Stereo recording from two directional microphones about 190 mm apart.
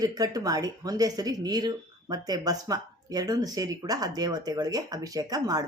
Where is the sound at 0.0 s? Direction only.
20° right (ahead or behind).